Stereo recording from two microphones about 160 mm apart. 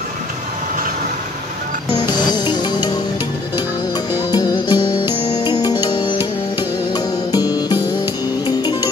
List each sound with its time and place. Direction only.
2.3 s music: 25° left (ahead or behind)
4.3 s music: 25° left (ahead or behind)